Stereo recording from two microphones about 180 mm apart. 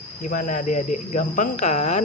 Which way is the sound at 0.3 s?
45° left (ahead or behind).